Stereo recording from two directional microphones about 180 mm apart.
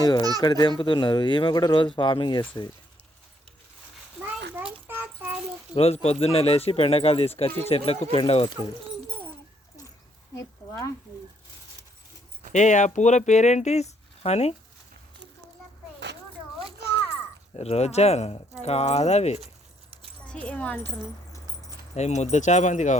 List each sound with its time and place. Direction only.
0.0 s a sound: 20° left (ahead or behind)
0.4 s speech: 25° left (ahead or behind)
4.9 s child singing: 10° right (ahead or behind)
5.7 s speech: 35° left (ahead or behind)
10.3 s speech: 15° left (ahead or behind)
12.5 s speech: 40° left (ahead or behind)
17.6 s speech: 35° left (ahead or behind)
20.2 s speech: 5° left (ahead or behind)
21.9 s speech: 40° left (ahead or behind)